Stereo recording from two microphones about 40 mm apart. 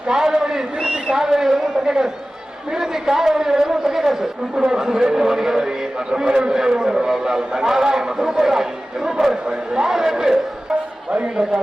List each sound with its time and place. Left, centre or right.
0.1 s a man's voice: centre